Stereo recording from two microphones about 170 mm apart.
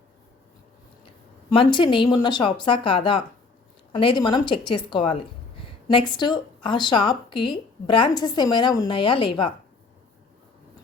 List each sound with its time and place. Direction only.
1.5 s speech: 30° left (ahead or behind)